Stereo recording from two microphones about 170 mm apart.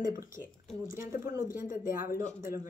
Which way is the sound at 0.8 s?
55° left (ahead or behind).